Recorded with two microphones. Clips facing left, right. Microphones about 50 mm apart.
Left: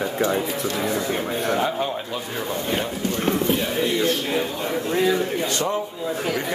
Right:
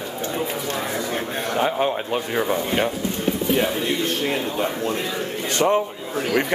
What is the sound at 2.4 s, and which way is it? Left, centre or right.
Speech, right.